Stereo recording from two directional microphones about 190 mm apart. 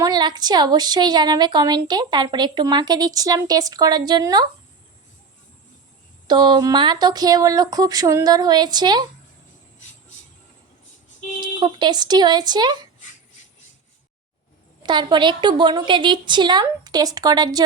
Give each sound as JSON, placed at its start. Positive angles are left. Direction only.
{"t": 0.0, "sound": "a woman's voice", "side_deg": -20}
{"t": 6.2, "sound": "a woman's voice", "side_deg": -25}
{"t": 11.3, "sound": "speech", "side_deg": -25}
{"t": 14.8, "sound": "a woman's voice", "side_deg": -25}